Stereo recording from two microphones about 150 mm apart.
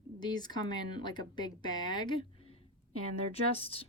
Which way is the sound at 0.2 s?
30° left (ahead or behind).